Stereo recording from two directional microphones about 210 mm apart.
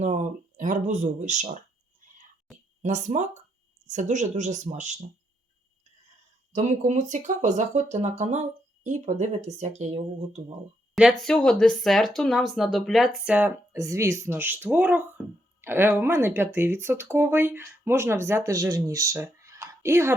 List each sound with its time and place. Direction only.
0.0 s speech: 35° right (ahead or behind)
2.8 s speech: 35° right (ahead or behind)
6.5 s speech: 35° right (ahead or behind)
10.9 s speech: centre (ahead or behind)